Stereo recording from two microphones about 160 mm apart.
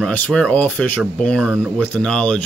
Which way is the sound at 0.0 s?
5° left (ahead or behind).